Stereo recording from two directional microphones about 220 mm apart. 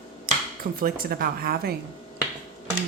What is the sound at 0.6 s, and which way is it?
Speech, 40° right (ahead or behind).